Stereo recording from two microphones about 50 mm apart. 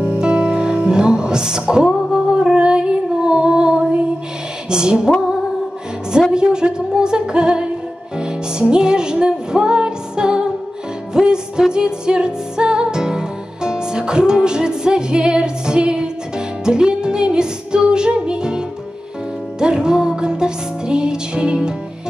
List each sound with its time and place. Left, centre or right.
0.0 s music: right
1.9 s music: centre
2.1 s female singing: centre
4.6 s music: centre
6.3 s music: centre
19.6 s music: centre